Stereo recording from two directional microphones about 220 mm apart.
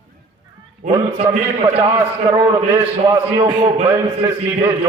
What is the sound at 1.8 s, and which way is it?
A man's voice, 15° right (ahead or behind).